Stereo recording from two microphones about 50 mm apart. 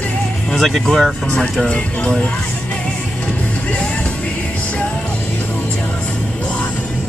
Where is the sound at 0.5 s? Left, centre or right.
Centre.